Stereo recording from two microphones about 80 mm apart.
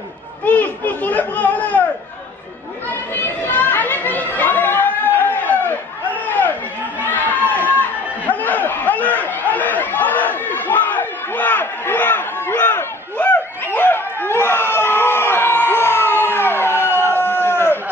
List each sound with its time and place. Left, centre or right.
0.5 s speech: left
3.4 s chatter: left